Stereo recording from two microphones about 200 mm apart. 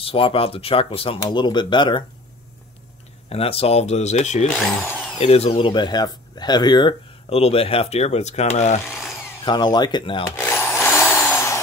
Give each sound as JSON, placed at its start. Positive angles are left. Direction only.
{"t": 0.0, "sound": "speech", "side_deg": 30}
{"t": 3.3, "sound": "speech", "side_deg": 30}
{"t": 4.6, "sound": "speech", "side_deg": 5}
{"t": 5.2, "sound": "speech", "side_deg": 30}
{"t": 9.4, "sound": "speech", "side_deg": 20}
{"t": 10.2, "sound": "drill", "side_deg": 10}